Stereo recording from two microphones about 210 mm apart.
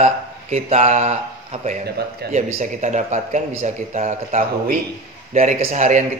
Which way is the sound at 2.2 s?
50° right (ahead or behind).